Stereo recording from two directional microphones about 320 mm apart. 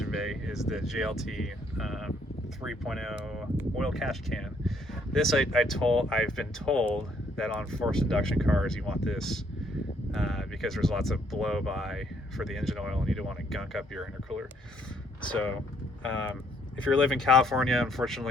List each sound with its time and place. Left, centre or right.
0.0 s speech: centre
16.7 s speech: centre